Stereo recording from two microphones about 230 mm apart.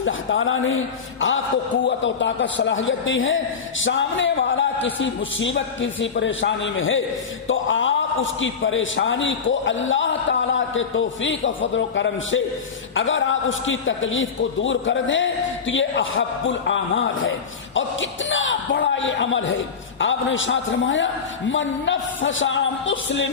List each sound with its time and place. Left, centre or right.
0.0 s a man's voice: left